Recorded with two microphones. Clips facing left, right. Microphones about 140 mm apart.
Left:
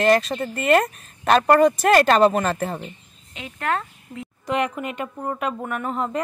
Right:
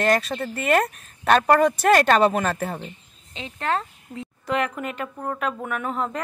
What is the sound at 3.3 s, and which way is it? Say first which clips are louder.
Speech: even; 30° right (ahead or behind).